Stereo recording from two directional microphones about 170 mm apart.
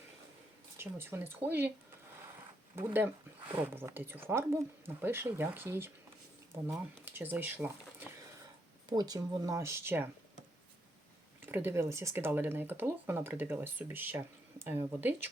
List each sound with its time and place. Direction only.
0.8 s speech: 15° right (ahead or behind)
2.7 s speech: 10° right (ahead or behind)
8.9 s speech: 25° right (ahead or behind)
11.4 s speech: 15° right (ahead or behind)